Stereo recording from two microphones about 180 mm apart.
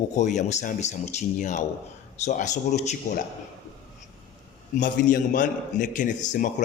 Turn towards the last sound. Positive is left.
turn(degrees=45)  # may be behind; listen again after turning